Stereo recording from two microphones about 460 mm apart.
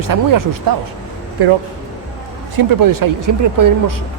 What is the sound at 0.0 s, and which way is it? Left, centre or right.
Speech, right.